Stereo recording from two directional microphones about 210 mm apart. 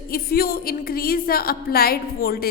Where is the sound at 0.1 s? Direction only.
45° left (ahead or behind).